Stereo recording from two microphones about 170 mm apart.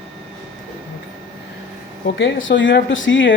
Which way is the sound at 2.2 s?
90° left.